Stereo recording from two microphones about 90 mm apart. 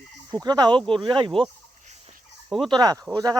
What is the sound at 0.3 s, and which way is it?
Speech, 50° right (ahead or behind).